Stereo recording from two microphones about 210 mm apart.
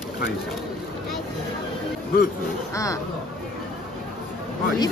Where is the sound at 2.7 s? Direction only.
15° left (ahead or behind).